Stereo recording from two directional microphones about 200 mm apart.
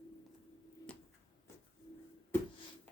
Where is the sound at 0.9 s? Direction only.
5° left (ahead or behind).